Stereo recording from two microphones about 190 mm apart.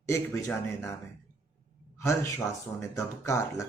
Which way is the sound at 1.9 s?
15° left (ahead or behind).